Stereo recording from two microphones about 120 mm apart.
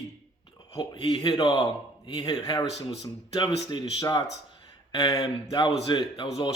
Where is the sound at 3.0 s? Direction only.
40° left (ahead or behind).